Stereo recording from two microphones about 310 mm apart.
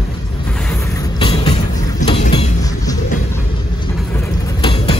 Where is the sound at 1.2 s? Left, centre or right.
Centre.